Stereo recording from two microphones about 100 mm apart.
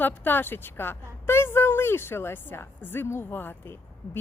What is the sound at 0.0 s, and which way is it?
A woman's voice, 20° left (ahead or behind).